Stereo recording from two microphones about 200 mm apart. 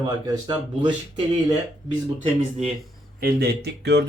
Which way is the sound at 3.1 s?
50° right (ahead or behind).